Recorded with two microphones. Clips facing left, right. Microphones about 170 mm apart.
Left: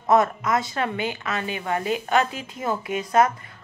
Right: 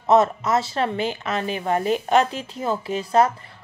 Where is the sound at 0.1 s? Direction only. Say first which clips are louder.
Right 2 dB; 30° right (ahead or behind).